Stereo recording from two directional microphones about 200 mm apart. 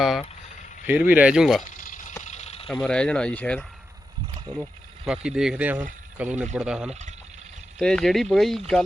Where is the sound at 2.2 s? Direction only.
35° left (ahead or behind).